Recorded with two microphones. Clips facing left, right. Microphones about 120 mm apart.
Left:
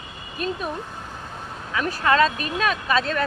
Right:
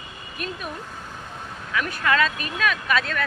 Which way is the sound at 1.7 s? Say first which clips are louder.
Left 3 dB; 30° left (ahead or behind).